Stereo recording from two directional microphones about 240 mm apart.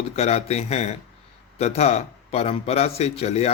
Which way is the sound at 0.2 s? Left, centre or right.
Left.